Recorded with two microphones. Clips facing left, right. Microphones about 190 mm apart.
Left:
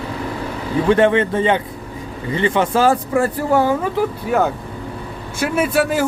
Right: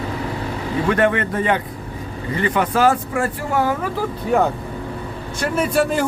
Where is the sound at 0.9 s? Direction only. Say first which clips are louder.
Left 5 dB; 25° left (ahead or behind).